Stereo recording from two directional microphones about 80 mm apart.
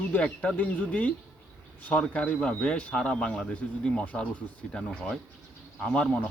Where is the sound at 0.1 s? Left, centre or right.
Centre.